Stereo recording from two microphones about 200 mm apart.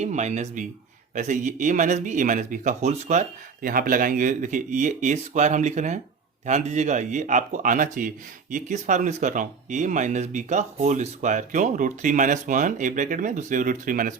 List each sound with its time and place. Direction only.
0.0 s speech: 35° right (ahead or behind)